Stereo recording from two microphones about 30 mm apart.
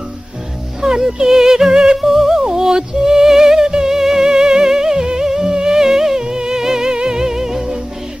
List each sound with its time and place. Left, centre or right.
0.7 s speech: right
2.0 s music: centre